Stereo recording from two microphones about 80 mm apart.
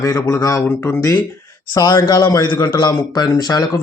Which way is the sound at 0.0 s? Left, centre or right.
Left.